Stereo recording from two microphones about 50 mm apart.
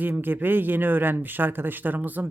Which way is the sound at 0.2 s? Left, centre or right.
Right.